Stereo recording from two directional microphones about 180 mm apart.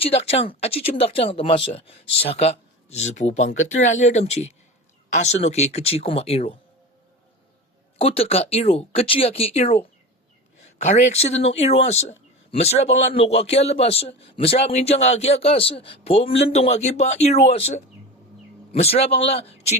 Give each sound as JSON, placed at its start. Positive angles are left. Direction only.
{"t": 0.0, "sound": "speech", "side_deg": 35}
{"t": 7.9, "sound": "speech", "side_deg": 35}
{"t": 10.8, "sound": "speech", "side_deg": 40}